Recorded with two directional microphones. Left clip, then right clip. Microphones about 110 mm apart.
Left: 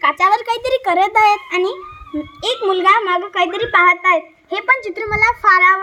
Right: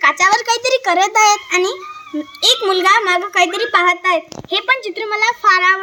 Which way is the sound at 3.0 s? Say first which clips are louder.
Right 3 dB; 40° left (ahead or behind).